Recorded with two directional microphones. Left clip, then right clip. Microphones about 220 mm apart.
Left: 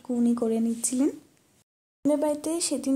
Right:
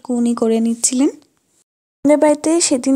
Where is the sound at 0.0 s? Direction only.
30° right (ahead or behind).